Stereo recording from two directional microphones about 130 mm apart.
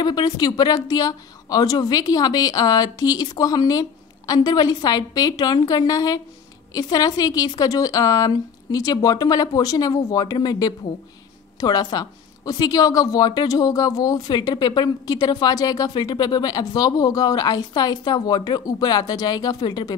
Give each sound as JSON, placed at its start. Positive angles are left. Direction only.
{"t": 0.0, "sound": "a woman's voice", "side_deg": 30}